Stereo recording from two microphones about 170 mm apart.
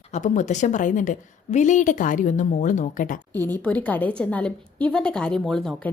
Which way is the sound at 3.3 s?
10° left (ahead or behind).